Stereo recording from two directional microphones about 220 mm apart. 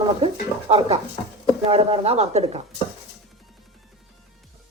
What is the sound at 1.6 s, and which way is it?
Speech, 25° right (ahead or behind).